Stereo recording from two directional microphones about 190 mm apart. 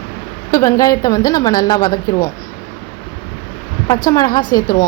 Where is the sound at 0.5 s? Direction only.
20° left (ahead or behind).